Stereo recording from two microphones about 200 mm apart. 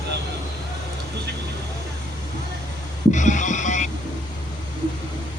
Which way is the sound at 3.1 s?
40° left (ahead or behind).